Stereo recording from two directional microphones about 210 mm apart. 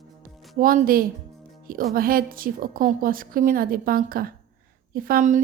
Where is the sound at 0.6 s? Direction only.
40° right (ahead or behind).